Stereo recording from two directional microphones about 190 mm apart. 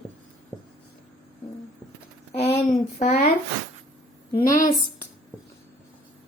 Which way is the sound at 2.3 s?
35° left (ahead or behind).